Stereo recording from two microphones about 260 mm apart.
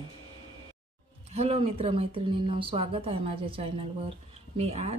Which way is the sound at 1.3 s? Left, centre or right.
Right.